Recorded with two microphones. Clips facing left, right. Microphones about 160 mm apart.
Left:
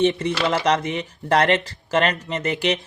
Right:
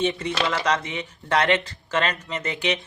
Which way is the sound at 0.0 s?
30° left (ahead or behind).